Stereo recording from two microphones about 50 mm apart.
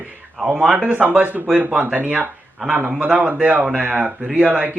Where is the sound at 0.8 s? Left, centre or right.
Right.